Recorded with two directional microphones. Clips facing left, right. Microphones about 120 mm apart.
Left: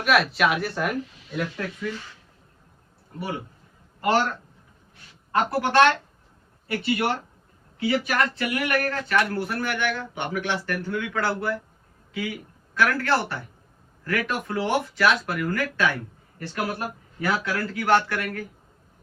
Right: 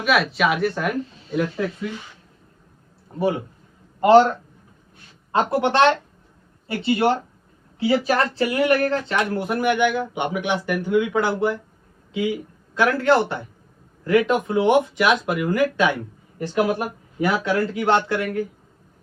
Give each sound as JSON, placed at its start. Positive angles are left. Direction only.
{"t": 0.0, "sound": "speech", "side_deg": 0}
{"t": 3.2, "sound": "speech", "side_deg": -25}
{"t": 5.3, "sound": "a man's voice", "side_deg": -20}